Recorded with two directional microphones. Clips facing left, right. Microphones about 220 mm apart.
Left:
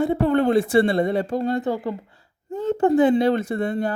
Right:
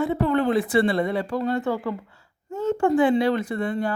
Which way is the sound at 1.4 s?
35° left (ahead or behind).